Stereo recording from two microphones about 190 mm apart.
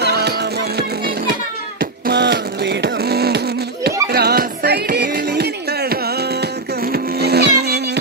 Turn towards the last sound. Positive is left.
turn(degrees=-60)  # may be behind; listen again after turning